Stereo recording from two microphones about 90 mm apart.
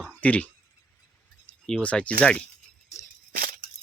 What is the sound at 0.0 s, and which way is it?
Speech, 15° left (ahead or behind).